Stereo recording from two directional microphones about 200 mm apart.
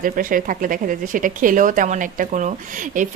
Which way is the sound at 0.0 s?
45° right (ahead or behind).